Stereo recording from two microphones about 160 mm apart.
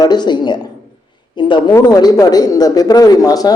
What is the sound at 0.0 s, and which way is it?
Speech, 25° left (ahead or behind).